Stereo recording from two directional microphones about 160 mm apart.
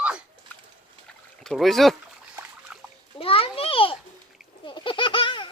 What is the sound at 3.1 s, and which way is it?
Speech, 35° left (ahead or behind).